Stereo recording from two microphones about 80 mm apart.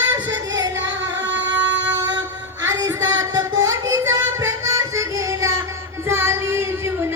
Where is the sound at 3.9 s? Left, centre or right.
Right.